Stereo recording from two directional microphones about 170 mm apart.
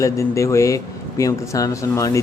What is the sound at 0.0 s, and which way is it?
Speech, 15° left (ahead or behind).